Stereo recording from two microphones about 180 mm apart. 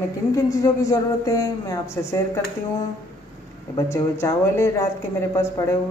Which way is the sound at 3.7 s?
15° left (ahead or behind).